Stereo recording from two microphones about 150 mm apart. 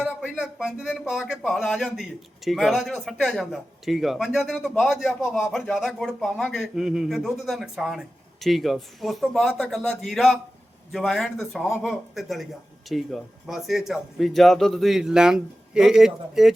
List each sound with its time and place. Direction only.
0.0 s speech: 5° right (ahead or behind)